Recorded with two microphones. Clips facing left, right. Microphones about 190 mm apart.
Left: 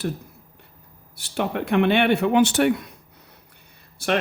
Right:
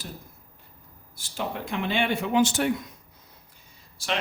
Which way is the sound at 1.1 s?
65° left (ahead or behind).